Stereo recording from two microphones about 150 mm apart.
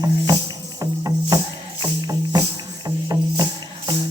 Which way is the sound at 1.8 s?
25° right (ahead or behind).